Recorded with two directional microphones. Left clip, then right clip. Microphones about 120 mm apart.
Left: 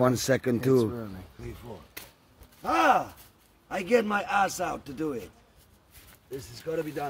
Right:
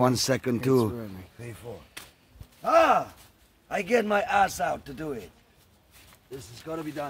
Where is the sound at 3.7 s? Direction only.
45° right (ahead or behind).